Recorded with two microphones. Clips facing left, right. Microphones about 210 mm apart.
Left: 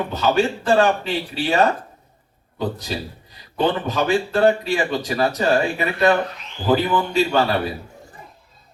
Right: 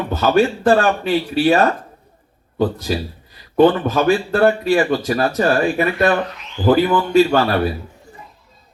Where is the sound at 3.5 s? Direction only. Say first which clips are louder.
Right 7 dB; 50° right (ahead or behind).